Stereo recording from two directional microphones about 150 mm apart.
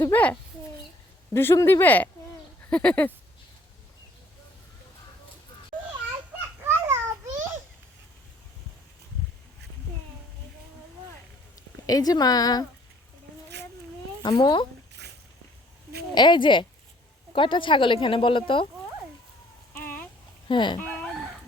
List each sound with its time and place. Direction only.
0.0 s speech: 10° left (ahead or behind)
5.7 s children playing: 60° right (ahead or behind)
6.7 s children playing: 15° right (ahead or behind)
11.9 s a woman's voice: 25° left (ahead or behind)
14.2 s a woman's voice: 30° left (ahead or behind)
16.1 s speech: 30° left (ahead or behind)
19.7 s a sound: 10° left (ahead or behind)
20.5 s speech: 30° left (ahead or behind)
20.7 s chicken: 10° left (ahead or behind)